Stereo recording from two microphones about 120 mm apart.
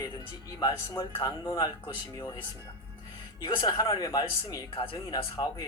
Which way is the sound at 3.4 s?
40° left (ahead or behind).